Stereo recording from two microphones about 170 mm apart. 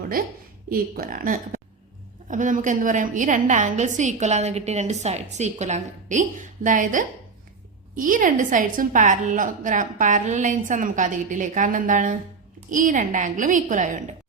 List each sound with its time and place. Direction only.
0.2 s a woman's voice: 60° right (ahead or behind)